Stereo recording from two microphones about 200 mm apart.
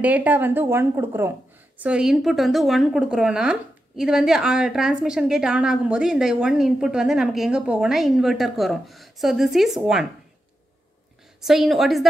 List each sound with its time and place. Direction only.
0.0 s a woman's voice: 10° right (ahead or behind)
11.4 s a woman's voice: centre (ahead or behind)